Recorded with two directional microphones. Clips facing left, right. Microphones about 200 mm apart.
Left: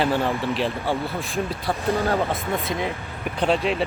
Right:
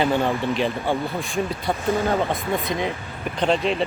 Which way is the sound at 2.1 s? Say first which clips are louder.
Right 1 dB; 15° right (ahead or behind).